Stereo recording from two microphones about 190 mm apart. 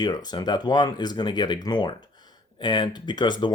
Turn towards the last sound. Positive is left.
turn(degrees=25)  # may be behind; listen again after turning